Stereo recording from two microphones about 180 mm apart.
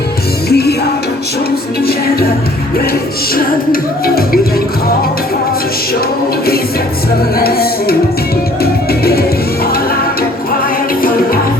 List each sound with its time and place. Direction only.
0.5 s music: 65° left (ahead or behind)
3.3 s music: 55° left (ahead or behind)
7.3 s music: 60° left (ahead or behind)